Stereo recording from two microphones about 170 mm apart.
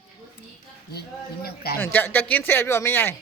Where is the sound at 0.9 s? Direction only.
65° left (ahead or behind).